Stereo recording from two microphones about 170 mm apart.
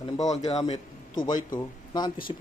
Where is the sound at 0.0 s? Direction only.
45° left (ahead or behind).